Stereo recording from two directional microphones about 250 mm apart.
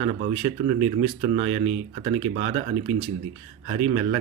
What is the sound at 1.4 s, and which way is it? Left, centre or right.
Speech, right.